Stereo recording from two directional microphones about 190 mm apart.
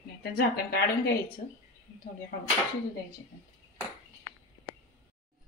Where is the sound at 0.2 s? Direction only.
55° left (ahead or behind).